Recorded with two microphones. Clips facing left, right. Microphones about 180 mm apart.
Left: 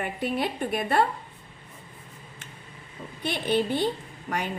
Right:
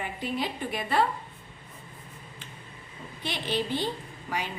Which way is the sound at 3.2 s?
55° left (ahead or behind).